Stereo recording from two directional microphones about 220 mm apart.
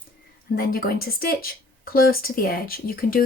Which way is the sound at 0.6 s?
45° left (ahead or behind).